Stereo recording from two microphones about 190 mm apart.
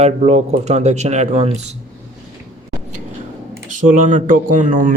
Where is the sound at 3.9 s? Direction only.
40° right (ahead or behind).